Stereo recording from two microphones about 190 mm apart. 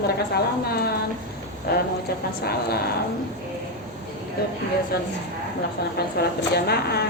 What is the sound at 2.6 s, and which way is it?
Speech, 55° left (ahead or behind).